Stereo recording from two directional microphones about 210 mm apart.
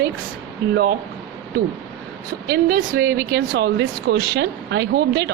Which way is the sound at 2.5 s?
45° right (ahead or behind).